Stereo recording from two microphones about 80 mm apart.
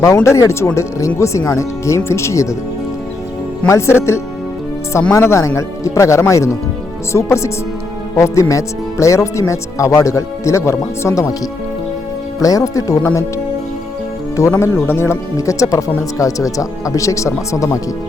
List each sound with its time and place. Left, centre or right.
0.0 s speech: left
3.7 s speech: left
12.4 s speech: left
14.4 s speech: left